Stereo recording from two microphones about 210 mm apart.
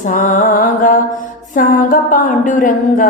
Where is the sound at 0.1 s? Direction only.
35° left (ahead or behind).